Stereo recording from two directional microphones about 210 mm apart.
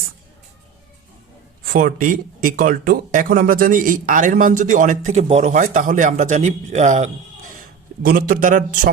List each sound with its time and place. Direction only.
1.6 s a man's voice: 40° right (ahead or behind)